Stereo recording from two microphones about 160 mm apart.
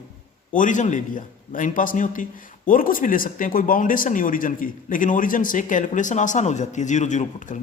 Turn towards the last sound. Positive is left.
turn(degrees=45)  # may be behind; listen again after turning